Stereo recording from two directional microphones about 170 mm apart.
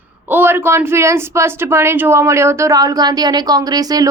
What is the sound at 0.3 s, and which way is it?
Speech, 10° right (ahead or behind).